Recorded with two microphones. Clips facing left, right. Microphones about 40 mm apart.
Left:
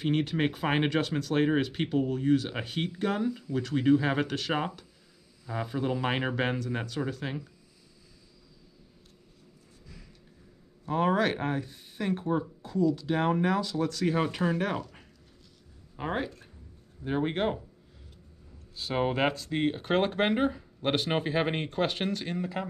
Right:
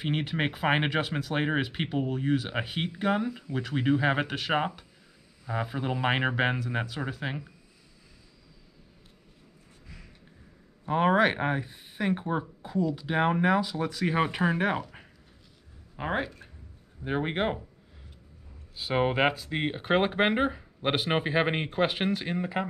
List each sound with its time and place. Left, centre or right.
0.0 s speech: centre
10.9 s speech: right
18.8 s speech: centre